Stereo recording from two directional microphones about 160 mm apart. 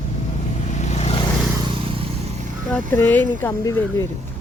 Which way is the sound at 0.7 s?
45° left (ahead or behind).